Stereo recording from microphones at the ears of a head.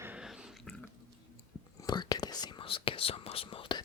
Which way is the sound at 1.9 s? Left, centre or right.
Left.